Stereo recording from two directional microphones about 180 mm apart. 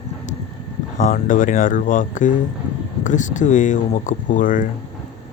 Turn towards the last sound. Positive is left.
turn(degrees=45)  # may be behind; listen again after turning